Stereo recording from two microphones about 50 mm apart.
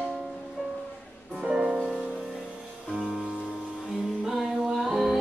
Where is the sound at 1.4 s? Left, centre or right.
Centre.